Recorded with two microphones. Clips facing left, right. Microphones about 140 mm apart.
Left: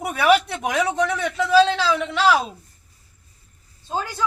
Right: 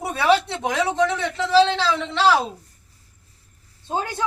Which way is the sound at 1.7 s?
10° left (ahead or behind).